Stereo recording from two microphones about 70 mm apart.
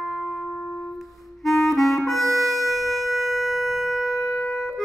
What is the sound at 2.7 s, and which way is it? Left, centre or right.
Wind instrument, centre.